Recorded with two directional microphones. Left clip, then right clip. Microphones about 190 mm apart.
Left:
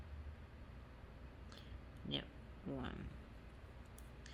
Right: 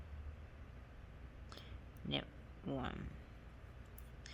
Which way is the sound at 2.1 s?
30° right (ahead or behind).